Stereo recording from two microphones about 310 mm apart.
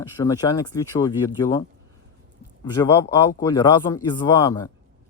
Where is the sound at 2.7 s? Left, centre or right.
Centre.